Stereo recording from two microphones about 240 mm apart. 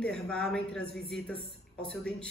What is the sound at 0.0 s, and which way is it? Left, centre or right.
Speech, centre.